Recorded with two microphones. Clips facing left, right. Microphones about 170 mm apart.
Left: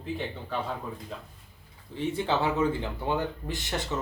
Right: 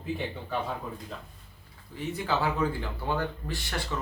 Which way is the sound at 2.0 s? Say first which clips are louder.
Left 2 dB; 25° left (ahead or behind).